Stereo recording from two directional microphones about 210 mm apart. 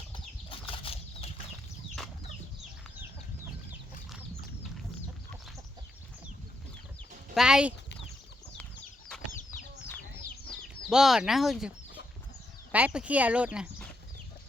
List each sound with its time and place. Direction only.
0.1 s bird flight: 25° left (ahead or behind)
7.3 s speech: 5° right (ahead or behind)
10.8 s speech: centre (ahead or behind)
12.7 s speech: 5° right (ahead or behind)